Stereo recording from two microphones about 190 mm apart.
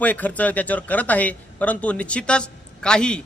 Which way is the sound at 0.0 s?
10° left (ahead or behind).